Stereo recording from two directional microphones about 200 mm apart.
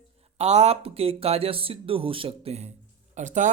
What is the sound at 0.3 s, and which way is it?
Speech, 35° right (ahead or behind).